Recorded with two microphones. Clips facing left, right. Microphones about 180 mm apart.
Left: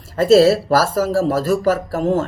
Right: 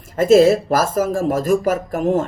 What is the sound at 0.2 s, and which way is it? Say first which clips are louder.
Speech: even; 15° right (ahead or behind).